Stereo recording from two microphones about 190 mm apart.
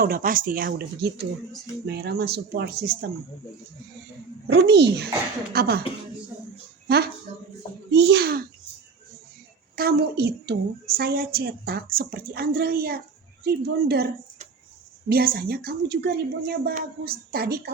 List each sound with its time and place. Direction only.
0.0 s a woman's voice: 50° right (ahead or behind)
4.5 s speech: 65° right (ahead or behind)
6.8 s a woman's voice: 60° right (ahead or behind)
9.7 s a woman's voice: 55° right (ahead or behind)
15.1 s a woman's voice: 50° right (ahead or behind)